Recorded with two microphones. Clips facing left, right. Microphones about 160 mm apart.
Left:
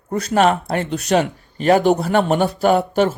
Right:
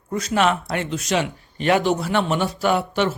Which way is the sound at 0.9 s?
65° left (ahead or behind).